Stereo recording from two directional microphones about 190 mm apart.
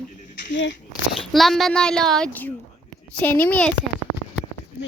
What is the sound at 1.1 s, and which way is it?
Speech, centre (ahead or behind).